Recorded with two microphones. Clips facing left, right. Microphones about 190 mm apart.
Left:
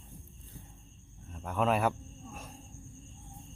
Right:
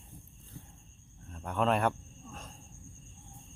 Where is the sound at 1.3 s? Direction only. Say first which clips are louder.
Even; centre (ahead or behind).